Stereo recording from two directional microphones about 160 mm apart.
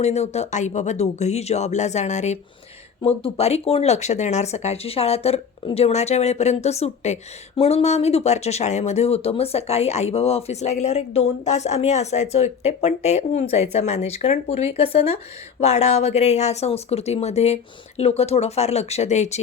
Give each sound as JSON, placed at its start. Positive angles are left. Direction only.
{"t": 0.0, "sound": "speech", "side_deg": 40}